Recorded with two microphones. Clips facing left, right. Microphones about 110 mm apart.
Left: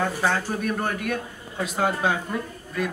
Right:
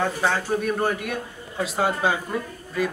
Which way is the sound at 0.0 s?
Centre (ahead or behind).